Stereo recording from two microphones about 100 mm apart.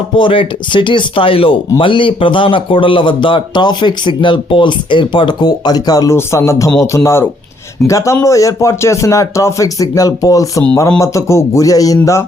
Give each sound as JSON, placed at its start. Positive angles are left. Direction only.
{"t": 0.2, "sound": "a man's voice", "side_deg": 60}